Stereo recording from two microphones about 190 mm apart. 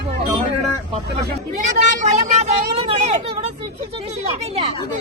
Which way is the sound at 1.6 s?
40° right (ahead or behind).